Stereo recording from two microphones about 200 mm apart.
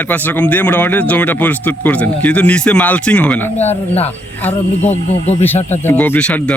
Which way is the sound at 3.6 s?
30° left (ahead or behind).